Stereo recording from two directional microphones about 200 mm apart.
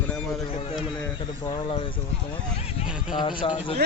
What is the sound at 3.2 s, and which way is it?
Speech, 25° left (ahead or behind).